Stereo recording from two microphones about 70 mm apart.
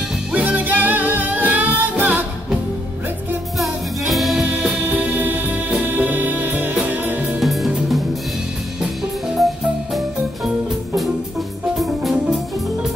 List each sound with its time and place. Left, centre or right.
0.3 s music: right
3.5 s music: centre
4.8 s music: right
7.3 s music: centre
11.8 s music: centre